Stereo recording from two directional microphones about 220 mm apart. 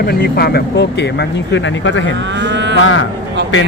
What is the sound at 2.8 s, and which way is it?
Speech, 65° left (ahead or behind).